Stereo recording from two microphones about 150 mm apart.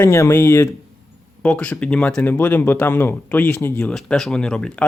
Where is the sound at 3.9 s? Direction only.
5° left (ahead or behind).